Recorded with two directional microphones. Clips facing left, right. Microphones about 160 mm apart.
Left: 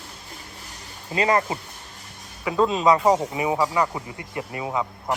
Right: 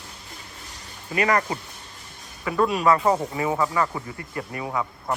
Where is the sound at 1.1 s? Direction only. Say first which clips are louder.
Left 1 dB; 25° left (ahead or behind).